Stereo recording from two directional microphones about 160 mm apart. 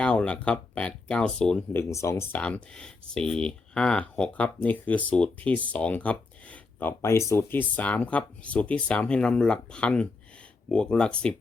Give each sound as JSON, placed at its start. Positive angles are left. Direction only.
{"t": 0.0, "sound": "speech", "side_deg": 5}
{"t": 1.8, "sound": "speech", "side_deg": 20}
{"t": 2.4, "sound": "speech", "side_deg": 5}